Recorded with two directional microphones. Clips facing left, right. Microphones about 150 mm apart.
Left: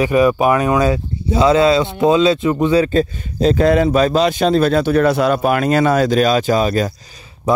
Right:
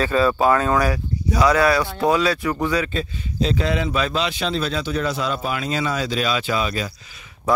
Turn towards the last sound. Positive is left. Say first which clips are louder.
# left 4 dB
turn(degrees=20)  # may be behind; listen again after turning